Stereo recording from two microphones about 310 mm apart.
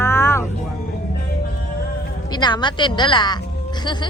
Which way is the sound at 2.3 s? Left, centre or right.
Centre.